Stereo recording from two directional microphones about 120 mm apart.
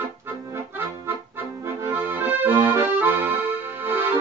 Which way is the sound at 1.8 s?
15° right (ahead or behind).